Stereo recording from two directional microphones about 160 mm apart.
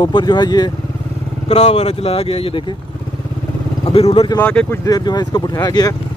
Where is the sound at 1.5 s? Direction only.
45° left (ahead or behind).